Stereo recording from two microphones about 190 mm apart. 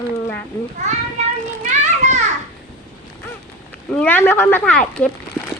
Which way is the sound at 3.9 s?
10° left (ahead or behind).